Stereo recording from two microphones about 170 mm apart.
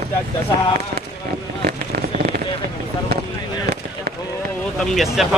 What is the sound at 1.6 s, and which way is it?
Fireworks, 70° right (ahead or behind).